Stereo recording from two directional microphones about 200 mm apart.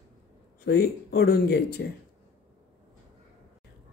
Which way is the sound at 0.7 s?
50° left (ahead or behind).